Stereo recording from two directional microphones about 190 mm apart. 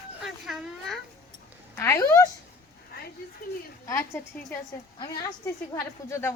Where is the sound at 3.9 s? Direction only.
15° left (ahead or behind).